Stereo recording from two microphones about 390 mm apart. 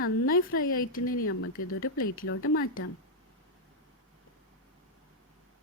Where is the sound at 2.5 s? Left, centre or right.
Left.